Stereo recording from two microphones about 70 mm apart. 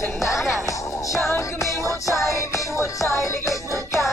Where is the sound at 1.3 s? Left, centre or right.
Left.